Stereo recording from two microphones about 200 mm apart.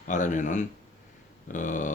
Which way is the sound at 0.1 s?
40° left (ahead or behind).